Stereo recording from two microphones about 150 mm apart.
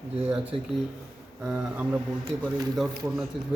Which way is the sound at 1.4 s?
5° right (ahead or behind).